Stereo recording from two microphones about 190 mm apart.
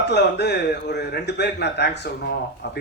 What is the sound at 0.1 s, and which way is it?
Speech, 60° left (ahead or behind).